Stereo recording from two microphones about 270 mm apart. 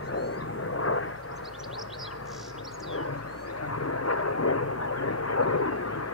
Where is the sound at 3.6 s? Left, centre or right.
Left.